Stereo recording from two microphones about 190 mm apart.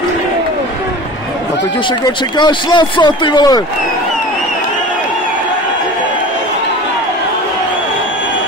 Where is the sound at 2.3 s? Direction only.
25° left (ahead or behind).